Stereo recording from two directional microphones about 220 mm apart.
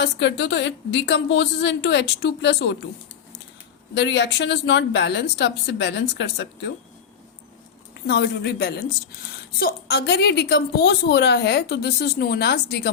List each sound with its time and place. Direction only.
0.0 s a woman's voice: 55° left (ahead or behind)
3.9 s a woman's voice: 55° left (ahead or behind)
8.0 s a woman's voice: 50° left (ahead or behind)